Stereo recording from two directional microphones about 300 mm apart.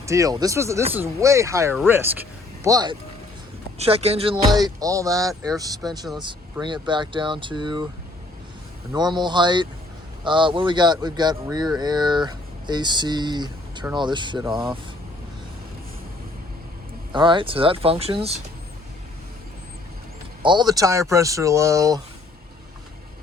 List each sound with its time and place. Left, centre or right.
0.0 s speech: centre
8.9 s speech: centre
14.4 s speech: centre
17.1 s speech: centre
20.4 s speech: centre